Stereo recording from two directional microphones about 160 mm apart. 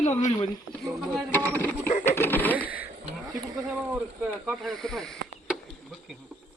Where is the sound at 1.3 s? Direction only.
10° left (ahead or behind).